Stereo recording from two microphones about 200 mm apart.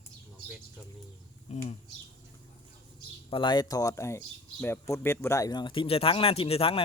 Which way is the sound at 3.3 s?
20° left (ahead or behind).